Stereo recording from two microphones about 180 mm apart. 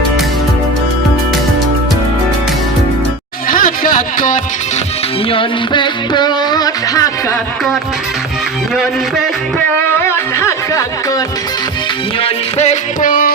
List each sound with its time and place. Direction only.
3.5 s music: 50° left (ahead or behind)
5.3 s music: 25° left (ahead or behind)
8.7 s music: centre (ahead or behind)
9.7 s music: 15° left (ahead or behind)
12.2 s music: 40° left (ahead or behind)